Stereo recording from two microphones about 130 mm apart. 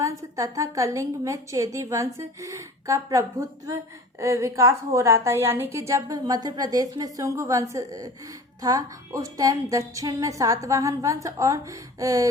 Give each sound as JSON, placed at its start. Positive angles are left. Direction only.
{"t": 0.0, "sound": "a woman's voice", "side_deg": -25}